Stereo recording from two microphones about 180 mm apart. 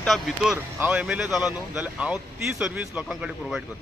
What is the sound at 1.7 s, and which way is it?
Speech, 5° right (ahead or behind).